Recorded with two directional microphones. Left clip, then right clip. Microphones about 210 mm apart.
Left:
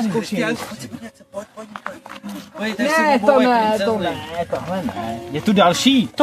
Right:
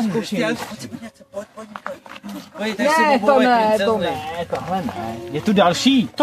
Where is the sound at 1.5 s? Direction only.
5° right (ahead or behind).